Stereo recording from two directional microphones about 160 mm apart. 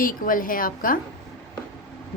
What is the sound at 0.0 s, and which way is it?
Speech, 60° left (ahead or behind).